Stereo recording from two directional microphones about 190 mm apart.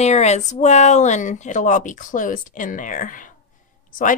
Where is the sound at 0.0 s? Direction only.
35° left (ahead or behind).